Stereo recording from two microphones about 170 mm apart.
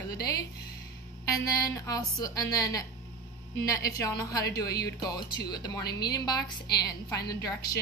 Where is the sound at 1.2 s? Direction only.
20° left (ahead or behind).